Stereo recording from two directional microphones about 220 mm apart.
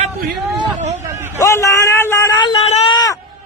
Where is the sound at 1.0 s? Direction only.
10° right (ahead or behind).